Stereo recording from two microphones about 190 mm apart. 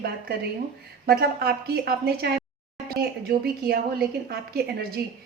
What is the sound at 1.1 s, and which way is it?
A woman's voice, 55° right (ahead or behind).